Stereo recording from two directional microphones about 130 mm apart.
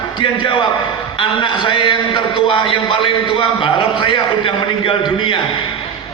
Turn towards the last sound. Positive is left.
turn(degrees=40)  # may be behind; listen again after turning